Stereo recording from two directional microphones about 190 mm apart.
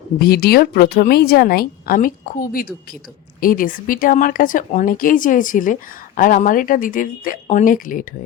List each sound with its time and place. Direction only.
0.2 s a woman's voice: 50° left (ahead or behind)